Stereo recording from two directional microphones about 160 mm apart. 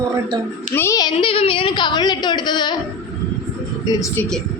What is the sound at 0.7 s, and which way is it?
Speech, 20° left (ahead or behind).